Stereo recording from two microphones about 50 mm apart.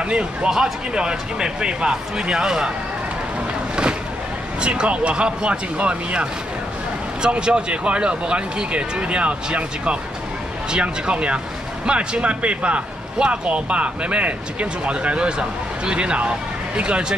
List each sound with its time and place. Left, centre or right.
0.0 s speech: right
4.6 s speech: right